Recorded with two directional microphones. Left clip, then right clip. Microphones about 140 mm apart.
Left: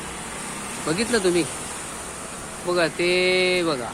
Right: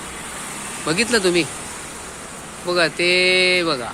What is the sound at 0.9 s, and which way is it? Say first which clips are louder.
Speech: right 4 dB; 15° right (ahead or behind).